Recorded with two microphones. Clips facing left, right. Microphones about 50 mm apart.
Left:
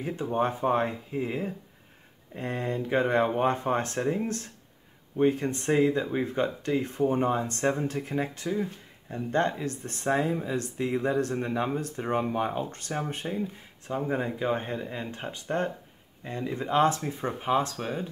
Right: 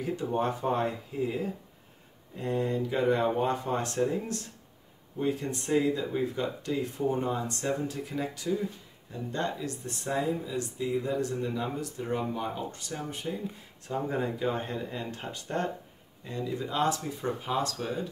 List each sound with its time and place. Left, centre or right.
0.0 s speech: left
5.1 s speech: left
13.8 s speech: left